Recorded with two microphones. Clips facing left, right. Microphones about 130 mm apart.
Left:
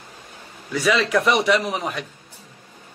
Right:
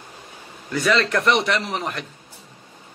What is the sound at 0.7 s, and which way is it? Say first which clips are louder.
A man's voice: even; centre (ahead or behind).